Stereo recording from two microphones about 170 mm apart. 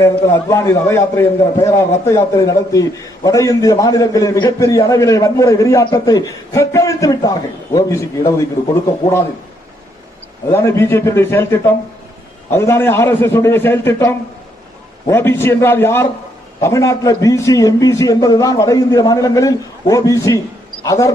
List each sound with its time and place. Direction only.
0.0 s a man's voice: 15° left (ahead or behind)
10.5 s a man's voice: 15° left (ahead or behind)